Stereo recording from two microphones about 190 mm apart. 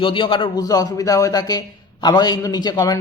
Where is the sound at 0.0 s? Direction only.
25° left (ahead or behind).